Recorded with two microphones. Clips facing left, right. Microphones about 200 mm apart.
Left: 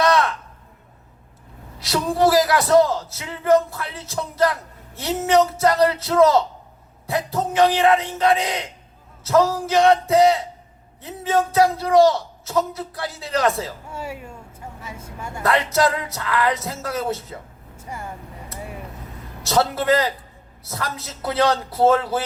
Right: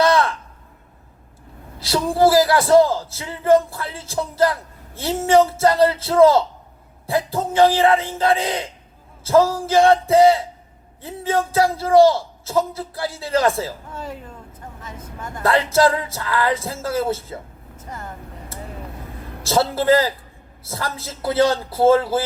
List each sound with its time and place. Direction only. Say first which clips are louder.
0.0 s a sound: right 2 dB; 25° right (ahead or behind)
1.8 s speech: right 2 dB; 30° right (ahead or behind)
13.8 s speech: even; 10° left (ahead or behind)
14.8 s vehicle: right 1 dB; 10° left (ahead or behind)
15.4 s speech: right 3 dB; 30° right (ahead or behind)
17.7 s speech: left 1 dB; 10° left (ahead or behind)
19.4 s speech: right 1 dB; 30° right (ahead or behind)